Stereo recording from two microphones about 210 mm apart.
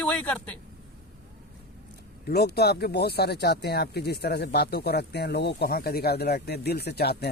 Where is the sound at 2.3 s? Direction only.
50° left (ahead or behind).